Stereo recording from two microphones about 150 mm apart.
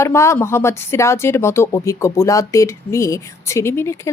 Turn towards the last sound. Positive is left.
turn(degrees=20)  # may be behind; listen again after turning